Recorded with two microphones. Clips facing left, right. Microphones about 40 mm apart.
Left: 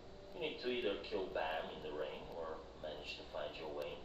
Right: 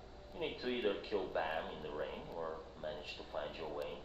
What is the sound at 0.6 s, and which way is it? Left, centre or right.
Speech, centre.